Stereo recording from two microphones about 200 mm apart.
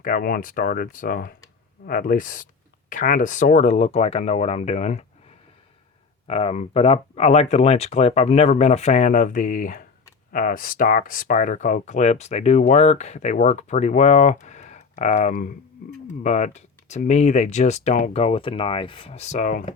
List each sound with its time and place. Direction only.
0.0 s speech: 45° left (ahead or behind)
6.2 s speech: 30° left (ahead or behind)